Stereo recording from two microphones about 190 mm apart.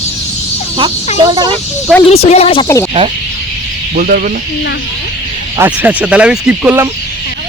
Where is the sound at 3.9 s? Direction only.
50° right (ahead or behind).